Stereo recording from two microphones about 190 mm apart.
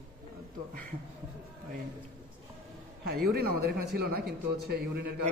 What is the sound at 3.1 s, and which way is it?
A man's voice, 55° right (ahead or behind).